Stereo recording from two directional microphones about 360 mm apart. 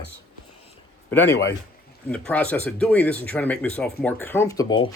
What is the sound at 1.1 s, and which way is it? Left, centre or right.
A man's voice, centre.